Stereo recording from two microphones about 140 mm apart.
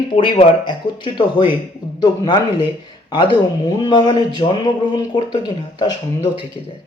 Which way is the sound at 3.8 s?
30° left (ahead or behind).